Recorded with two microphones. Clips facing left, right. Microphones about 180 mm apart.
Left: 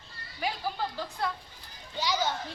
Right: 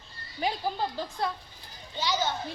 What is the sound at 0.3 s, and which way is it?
Speech, 25° right (ahead or behind).